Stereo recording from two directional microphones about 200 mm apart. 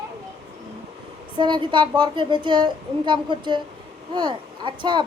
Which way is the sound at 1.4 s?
25° right (ahead or behind).